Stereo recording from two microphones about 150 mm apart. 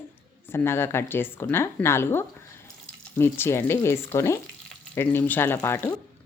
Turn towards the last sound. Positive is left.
turn(degrees=15)  # may be behind; listen again after turning